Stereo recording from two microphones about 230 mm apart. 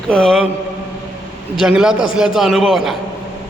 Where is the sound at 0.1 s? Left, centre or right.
Centre.